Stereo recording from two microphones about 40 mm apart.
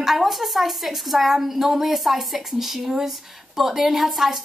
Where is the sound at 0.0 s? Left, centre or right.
Centre.